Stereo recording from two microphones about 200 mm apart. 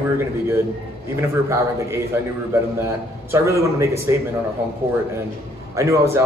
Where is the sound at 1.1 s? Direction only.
15° right (ahead or behind).